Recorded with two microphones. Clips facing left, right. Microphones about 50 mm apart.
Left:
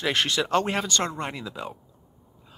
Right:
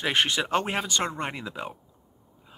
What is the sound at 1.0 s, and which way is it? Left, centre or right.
Speech, right.